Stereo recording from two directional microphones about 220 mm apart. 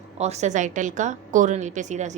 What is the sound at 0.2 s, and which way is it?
A woman's voice, 30° right (ahead or behind).